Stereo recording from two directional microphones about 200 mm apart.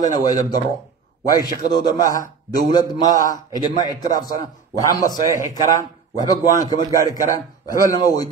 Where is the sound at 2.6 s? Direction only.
20° left (ahead or behind).